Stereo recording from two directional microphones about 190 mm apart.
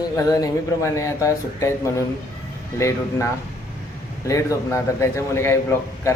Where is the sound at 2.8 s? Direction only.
15° left (ahead or behind).